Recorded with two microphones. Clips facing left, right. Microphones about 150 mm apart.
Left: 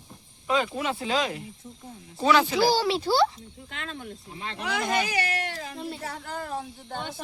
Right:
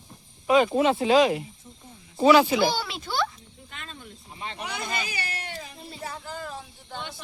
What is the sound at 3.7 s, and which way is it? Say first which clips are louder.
Speech: left 6 dB; 85° left.